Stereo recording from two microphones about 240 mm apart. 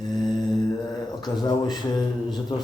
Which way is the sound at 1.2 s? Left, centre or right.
Centre.